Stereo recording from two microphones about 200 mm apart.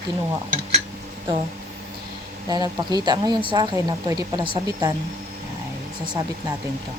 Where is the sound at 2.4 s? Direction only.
20° right (ahead or behind).